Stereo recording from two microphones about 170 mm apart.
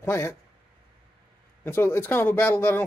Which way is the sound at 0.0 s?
20° left (ahead or behind).